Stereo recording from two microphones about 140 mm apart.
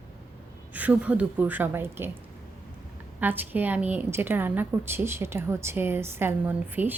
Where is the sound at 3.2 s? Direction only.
15° right (ahead or behind).